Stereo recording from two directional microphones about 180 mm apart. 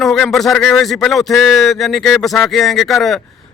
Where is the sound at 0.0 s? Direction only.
Centre (ahead or behind).